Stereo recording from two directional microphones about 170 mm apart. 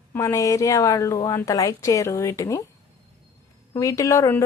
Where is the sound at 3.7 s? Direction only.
20° left (ahead or behind).